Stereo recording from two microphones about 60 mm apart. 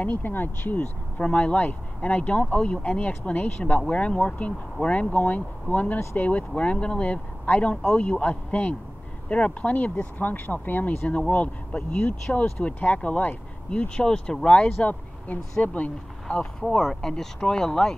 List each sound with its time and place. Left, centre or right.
0.0 s speech: left
16.6 s speech: centre